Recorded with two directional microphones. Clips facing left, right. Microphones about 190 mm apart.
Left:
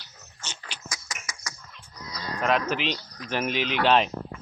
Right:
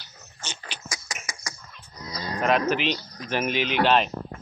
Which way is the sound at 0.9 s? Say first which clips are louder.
Right 2 dB; 10° right (ahead or behind).